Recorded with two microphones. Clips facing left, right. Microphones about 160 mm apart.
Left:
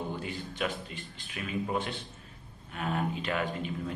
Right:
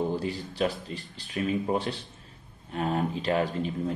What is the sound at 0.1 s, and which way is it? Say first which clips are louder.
Speech: right 6 dB; 35° right (ahead or behind).